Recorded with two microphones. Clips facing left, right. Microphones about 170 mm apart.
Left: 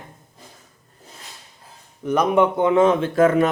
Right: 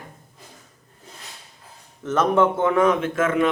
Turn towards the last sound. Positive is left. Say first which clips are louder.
# left 4 dB
turn(degrees=40)  # may be behind; listen again after turning